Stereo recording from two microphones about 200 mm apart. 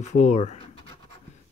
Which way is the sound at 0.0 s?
35° left (ahead or behind).